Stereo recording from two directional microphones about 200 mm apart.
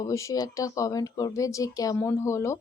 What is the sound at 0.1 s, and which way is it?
Speech, 15° left (ahead or behind).